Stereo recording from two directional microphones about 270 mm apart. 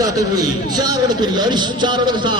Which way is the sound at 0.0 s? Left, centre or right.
Centre.